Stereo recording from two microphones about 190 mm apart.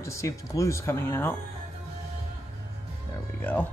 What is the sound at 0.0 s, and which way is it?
Speech, 15° left (ahead or behind).